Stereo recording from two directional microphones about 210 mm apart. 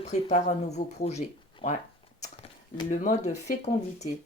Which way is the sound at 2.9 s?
35° left (ahead or behind).